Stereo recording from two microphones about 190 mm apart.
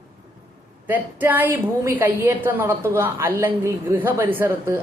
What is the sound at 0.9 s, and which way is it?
A woman's voice, 10° right (ahead or behind).